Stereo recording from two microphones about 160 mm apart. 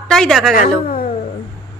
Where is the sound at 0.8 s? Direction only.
65° left (ahead or behind).